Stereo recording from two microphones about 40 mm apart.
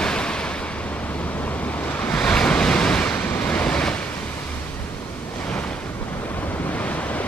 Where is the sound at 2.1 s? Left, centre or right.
Centre.